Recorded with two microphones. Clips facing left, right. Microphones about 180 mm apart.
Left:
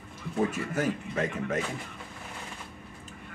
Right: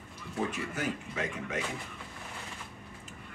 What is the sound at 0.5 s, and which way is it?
A man's voice, 45° left (ahead or behind).